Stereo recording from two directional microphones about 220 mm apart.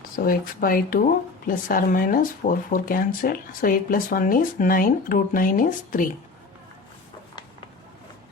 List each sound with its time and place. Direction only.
0.2 s speech: 40° left (ahead or behind)